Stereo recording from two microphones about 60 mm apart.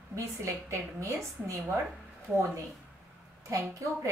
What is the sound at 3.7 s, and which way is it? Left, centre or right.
Speech, right.